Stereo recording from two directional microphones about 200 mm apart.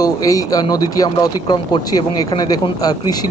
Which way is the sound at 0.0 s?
15° left (ahead or behind).